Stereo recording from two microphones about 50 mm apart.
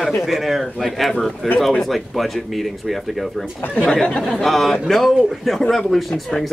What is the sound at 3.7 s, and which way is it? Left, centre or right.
Speech, centre.